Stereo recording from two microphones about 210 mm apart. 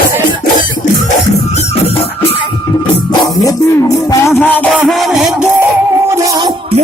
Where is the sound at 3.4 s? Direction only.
15° left (ahead or behind); by 5.7 s centre (ahead or behind).